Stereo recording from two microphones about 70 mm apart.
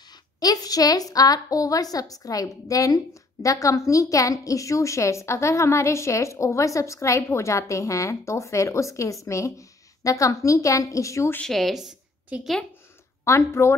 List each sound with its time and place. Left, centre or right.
0.4 s a woman's voice: left
11.4 s speech: centre
12.3 s a woman's voice: centre
13.2 s a woman's voice: left